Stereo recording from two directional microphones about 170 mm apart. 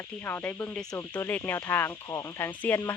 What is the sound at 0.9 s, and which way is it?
Speech, 20° left (ahead or behind).